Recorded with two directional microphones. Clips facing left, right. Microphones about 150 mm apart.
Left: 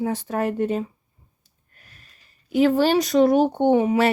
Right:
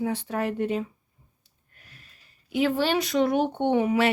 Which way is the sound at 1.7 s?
45° left (ahead or behind).